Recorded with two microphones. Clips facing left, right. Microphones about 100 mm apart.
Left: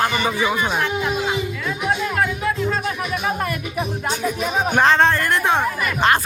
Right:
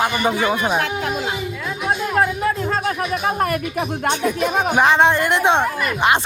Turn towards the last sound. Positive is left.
turn(degrees=-20)  # may be behind; listen again after turning